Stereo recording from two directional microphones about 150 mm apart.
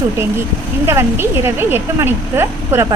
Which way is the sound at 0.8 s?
15° right (ahead or behind).